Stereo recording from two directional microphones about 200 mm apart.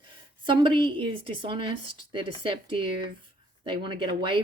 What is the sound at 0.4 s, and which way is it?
Speech, 25° right (ahead or behind).